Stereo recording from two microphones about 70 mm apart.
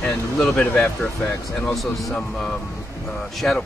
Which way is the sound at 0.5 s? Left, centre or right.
Left.